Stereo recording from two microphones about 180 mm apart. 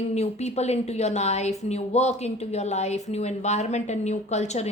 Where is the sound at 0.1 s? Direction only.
40° left (ahead or behind).